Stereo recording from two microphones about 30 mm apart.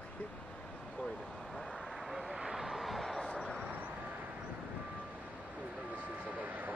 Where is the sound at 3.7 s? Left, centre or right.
Right.